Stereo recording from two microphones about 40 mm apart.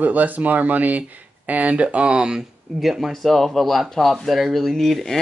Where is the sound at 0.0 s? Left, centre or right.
Right.